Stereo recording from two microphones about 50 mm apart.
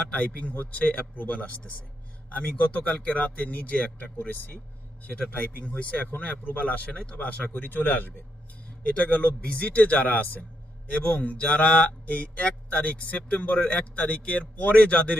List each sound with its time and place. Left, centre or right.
0.1 s speech: left